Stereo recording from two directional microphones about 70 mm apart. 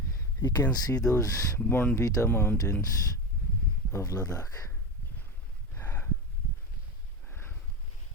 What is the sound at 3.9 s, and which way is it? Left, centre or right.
Speech, left.